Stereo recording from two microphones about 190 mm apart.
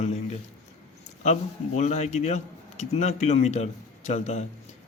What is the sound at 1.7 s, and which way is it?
A man's voice, 35° left (ahead or behind).